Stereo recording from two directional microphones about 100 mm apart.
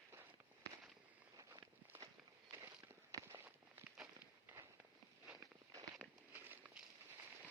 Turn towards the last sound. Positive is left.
turn(degrees=-15)  # may be behind; listen again after turning